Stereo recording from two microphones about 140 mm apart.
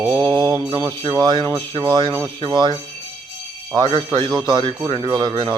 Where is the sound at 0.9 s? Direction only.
30° right (ahead or behind).